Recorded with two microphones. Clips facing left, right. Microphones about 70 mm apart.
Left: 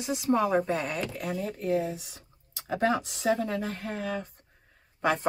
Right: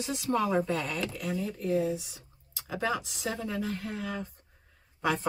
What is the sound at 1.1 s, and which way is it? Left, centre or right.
Speech, left.